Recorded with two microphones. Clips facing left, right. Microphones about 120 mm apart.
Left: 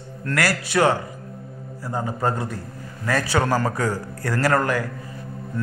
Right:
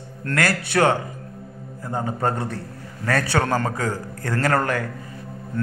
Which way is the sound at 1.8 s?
25° right (ahead or behind).